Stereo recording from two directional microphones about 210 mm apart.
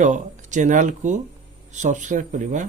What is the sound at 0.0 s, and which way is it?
Speech, 35° right (ahead or behind).